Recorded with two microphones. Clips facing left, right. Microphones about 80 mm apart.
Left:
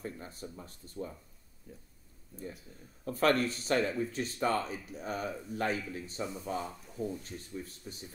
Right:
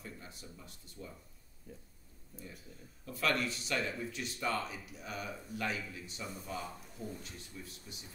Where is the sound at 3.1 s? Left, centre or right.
Left.